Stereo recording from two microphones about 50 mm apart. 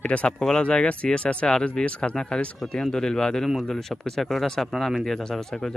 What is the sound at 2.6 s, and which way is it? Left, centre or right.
Speech, centre.